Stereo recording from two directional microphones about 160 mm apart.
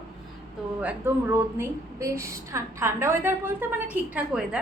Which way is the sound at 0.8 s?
10° right (ahead or behind).